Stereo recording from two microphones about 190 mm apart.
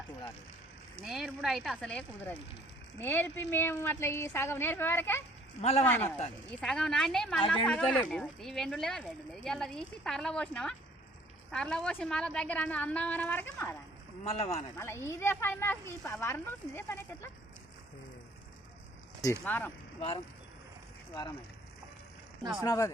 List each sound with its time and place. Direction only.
1.0 s speech: centre (ahead or behind)
14.3 s speech: 30° left (ahead or behind)
14.8 s speech: 15° left (ahead or behind)
19.2 s speech: 15° left (ahead or behind)
20.0 s speech: 30° left (ahead or behind)
22.6 s speech: 15° left (ahead or behind)